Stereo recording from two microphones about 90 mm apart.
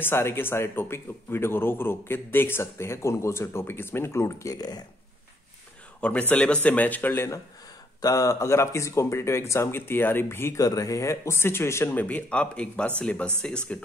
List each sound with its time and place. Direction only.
0.0 s a man's voice: 25° left (ahead or behind); by 4.8 s 50° left (ahead or behind)
5.9 s speech: 15° left (ahead or behind)
8.0 s speech: 40° left (ahead or behind)
10.6 s a man's voice: 40° left (ahead or behind); by 13.3 s 10° left (ahead or behind)